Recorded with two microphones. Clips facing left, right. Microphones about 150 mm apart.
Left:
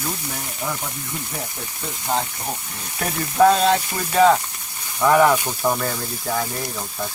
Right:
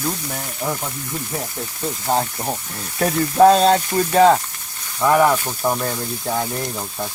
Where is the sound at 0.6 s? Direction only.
30° right (ahead or behind).